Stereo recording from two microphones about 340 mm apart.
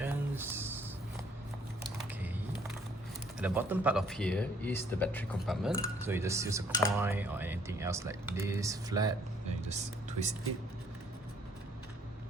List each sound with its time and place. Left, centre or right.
0.0 s a sound: centre
3.4 s speech: centre
6.1 s speech: centre